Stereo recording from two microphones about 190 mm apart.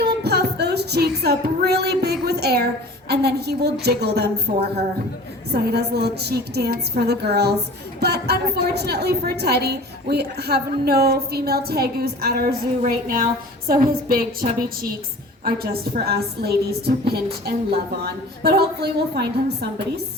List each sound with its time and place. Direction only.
0.2 s music: 60° right (ahead or behind)
2.2 s a sound: 60° right (ahead or behind)
3.1 s a woman's voice: 60° right (ahead or behind)